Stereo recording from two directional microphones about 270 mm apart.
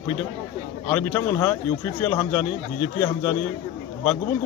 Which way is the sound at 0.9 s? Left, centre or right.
Centre.